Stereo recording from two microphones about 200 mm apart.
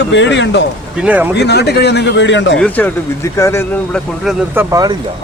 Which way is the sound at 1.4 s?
55° left (ahead or behind).